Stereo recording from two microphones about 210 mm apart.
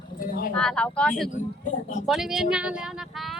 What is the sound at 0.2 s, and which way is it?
Speech, 40° left (ahead or behind).